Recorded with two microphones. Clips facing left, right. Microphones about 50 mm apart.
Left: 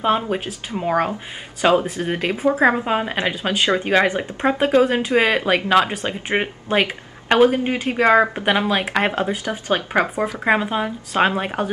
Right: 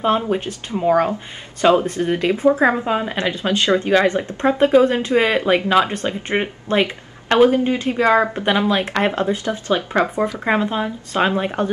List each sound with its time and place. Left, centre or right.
0.0 s speech: centre